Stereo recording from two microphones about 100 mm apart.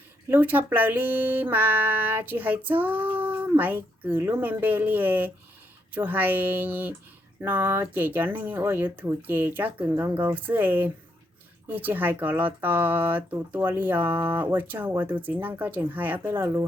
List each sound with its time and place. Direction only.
0.3 s speech: 20° right (ahead or behind)